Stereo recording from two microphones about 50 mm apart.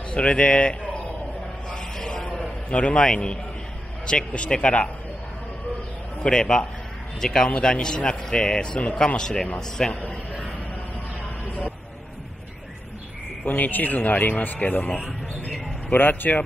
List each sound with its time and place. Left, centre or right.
0.1 s speech: left
1.7 s a sound: centre
2.2 s a sound: left
4.0 s speech: centre
6.2 s speech: centre
13.5 s a man's voice: left
15.9 s a man's voice: left